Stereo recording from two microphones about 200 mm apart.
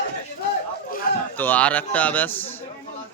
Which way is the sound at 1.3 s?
10° left (ahead or behind).